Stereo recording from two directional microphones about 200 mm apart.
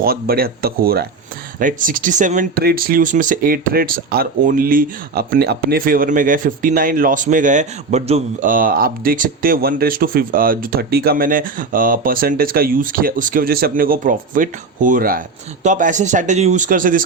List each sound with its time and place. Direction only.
0.0 s speech: 50° right (ahead or behind)